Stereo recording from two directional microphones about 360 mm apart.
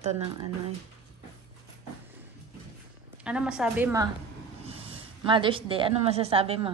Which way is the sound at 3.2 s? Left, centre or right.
Centre.